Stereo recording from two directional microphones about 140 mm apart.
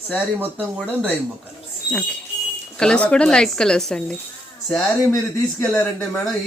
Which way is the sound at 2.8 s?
5° left (ahead or behind).